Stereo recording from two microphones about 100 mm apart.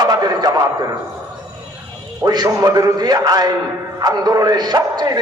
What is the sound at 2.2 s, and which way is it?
A man's voice, 40° right (ahead or behind).